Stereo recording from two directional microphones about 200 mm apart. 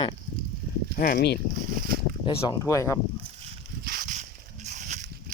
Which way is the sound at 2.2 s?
25° left (ahead or behind).